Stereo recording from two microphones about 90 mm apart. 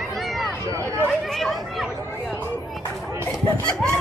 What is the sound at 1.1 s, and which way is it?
Chatter, centre (ahead or behind).